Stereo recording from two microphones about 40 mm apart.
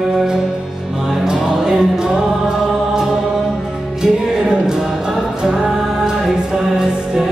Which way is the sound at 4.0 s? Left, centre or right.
Centre.